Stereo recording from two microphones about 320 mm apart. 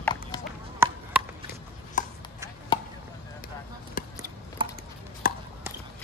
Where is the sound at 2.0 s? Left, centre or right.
Left.